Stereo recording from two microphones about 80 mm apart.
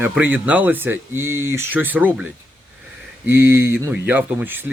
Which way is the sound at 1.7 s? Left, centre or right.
Right.